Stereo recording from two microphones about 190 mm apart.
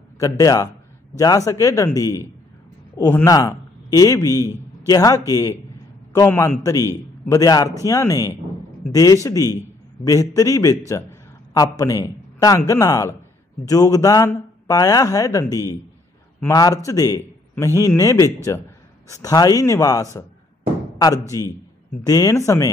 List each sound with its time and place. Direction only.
0.2 s a man's voice: 20° left (ahead or behind)
21.3 s a man's voice: 15° left (ahead or behind)